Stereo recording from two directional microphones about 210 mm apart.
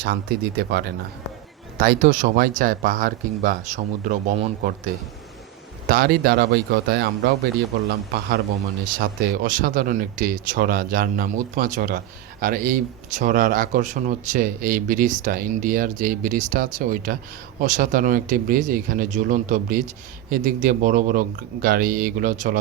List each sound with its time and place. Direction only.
0.0 s speech: 50° right (ahead or behind)
5.9 s speech: 45° right (ahead or behind)
9.0 s speech: 45° right (ahead or behind)